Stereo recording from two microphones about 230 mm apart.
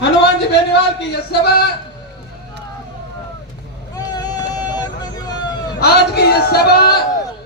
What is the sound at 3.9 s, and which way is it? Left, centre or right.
Vehicle, centre.